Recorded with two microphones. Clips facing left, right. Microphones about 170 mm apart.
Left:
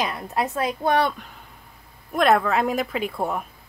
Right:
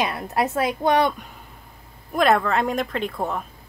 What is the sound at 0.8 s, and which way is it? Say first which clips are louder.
Speech: right 1 dB; 15° right (ahead or behind).